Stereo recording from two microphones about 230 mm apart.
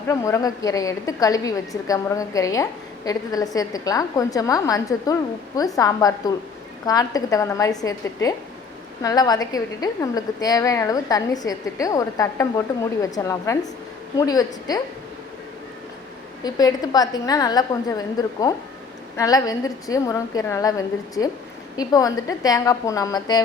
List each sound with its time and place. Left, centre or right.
0.1 s a woman's voice: centre
16.4 s a woman's voice: centre